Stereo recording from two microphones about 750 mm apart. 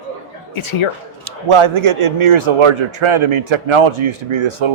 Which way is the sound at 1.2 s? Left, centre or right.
Right.